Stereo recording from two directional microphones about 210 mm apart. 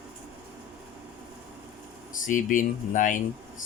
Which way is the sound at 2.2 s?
40° left (ahead or behind).